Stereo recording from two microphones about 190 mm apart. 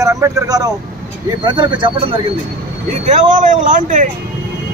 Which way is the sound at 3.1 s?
40° right (ahead or behind).